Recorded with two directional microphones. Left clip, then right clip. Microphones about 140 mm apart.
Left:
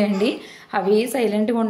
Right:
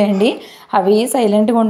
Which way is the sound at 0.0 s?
35° right (ahead or behind).